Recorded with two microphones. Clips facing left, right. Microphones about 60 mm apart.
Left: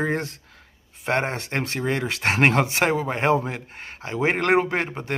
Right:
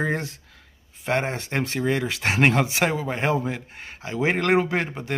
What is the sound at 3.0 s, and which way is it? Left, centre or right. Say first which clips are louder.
Speech: left 2 dB; left.